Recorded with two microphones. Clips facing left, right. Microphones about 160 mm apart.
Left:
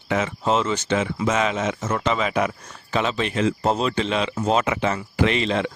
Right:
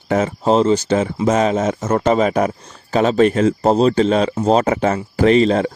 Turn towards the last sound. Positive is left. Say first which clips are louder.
# right 8 dB
turn(degrees=-40)  # may be behind; listen again after turning